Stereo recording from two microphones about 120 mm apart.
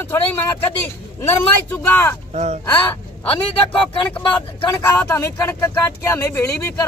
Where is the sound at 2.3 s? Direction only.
70° right (ahead or behind).